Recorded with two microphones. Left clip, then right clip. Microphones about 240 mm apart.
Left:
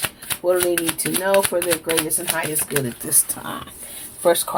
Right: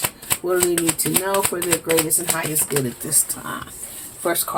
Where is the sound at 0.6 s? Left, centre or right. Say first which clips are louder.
Right 1 dB; left.